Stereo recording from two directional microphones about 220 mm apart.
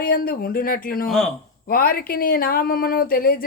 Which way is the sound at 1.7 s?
40° left (ahead or behind).